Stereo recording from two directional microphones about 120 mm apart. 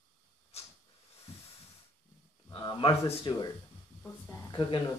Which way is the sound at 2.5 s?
45° left (ahead or behind).